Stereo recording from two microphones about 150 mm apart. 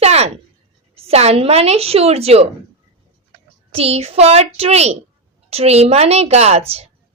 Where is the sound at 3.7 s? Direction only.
40° right (ahead or behind).